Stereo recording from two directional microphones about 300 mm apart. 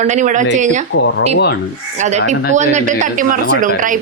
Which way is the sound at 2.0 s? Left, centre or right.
Right.